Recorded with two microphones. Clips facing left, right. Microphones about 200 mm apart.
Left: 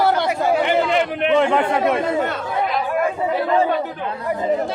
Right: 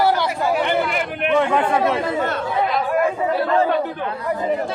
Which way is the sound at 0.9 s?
25° left (ahead or behind).